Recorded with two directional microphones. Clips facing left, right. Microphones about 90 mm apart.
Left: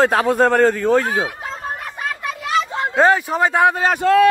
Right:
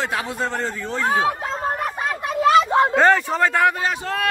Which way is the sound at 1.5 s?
35° right (ahead or behind).